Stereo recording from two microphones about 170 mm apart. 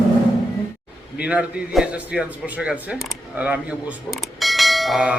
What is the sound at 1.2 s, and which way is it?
A man's voice, 5° right (ahead or behind).